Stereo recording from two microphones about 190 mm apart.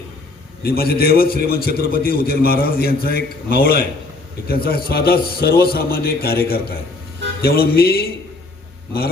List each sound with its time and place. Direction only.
0.6 s a man's voice: 55° left (ahead or behind)